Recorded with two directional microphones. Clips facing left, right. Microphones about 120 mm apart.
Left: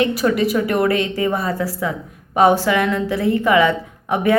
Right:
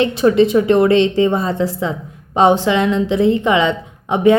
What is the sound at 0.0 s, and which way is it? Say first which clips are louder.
A woman's voice: right 5 dB; 25° right (ahead or behind).